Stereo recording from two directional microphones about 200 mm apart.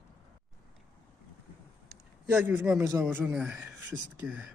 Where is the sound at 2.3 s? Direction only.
10° right (ahead or behind).